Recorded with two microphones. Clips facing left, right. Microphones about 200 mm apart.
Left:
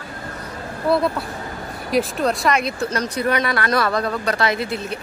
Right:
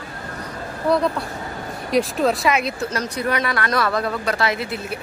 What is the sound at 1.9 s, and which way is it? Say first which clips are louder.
Speech: right 1 dB; centre (ahead or behind).